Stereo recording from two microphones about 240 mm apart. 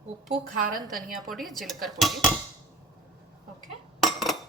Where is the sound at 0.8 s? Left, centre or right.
Centre.